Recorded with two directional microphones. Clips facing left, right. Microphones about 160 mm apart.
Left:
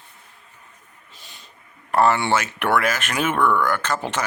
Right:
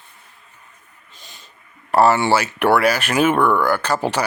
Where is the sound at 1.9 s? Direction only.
35° right (ahead or behind).